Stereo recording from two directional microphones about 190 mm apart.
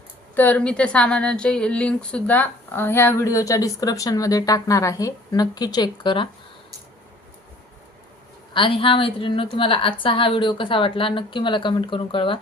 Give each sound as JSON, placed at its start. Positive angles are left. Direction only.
{"t": 0.3, "sound": "a woman's voice", "side_deg": 10}
{"t": 8.5, "sound": "a woman's voice", "side_deg": 25}